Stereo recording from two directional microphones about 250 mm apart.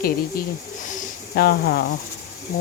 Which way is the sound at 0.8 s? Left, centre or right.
Left.